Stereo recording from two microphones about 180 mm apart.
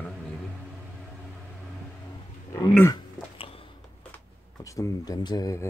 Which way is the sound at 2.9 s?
30° left (ahead or behind).